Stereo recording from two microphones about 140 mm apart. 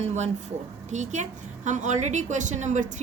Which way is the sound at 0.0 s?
55° right (ahead or behind).